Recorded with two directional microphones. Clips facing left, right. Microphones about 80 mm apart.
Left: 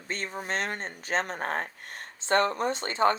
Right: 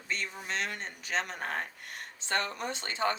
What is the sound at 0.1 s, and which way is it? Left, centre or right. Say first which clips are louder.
Speech: left 4 dB; left.